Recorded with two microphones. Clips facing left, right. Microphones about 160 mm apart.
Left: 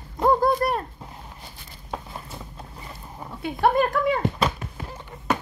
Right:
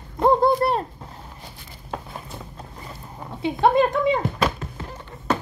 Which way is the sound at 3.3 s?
20° right (ahead or behind).